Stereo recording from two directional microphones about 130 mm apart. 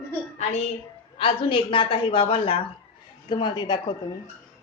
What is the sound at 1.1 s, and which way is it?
A woman's voice, 45° left (ahead or behind).